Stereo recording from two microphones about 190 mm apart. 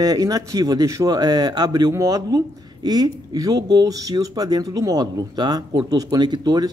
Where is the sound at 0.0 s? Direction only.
20° right (ahead or behind).